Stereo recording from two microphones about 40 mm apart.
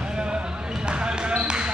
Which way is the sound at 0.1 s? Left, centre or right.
Right.